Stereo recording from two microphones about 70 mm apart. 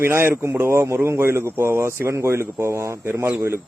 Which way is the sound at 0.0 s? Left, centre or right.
Right.